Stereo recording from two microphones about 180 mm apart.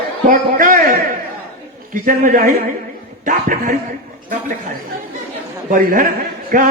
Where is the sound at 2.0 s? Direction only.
50° right (ahead or behind).